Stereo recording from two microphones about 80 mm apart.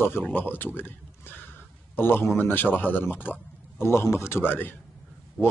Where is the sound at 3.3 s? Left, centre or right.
Left.